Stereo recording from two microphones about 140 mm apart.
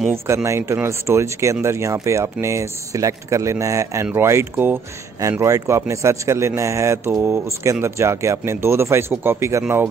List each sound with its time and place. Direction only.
0.1 s speech: 20° right (ahead or behind)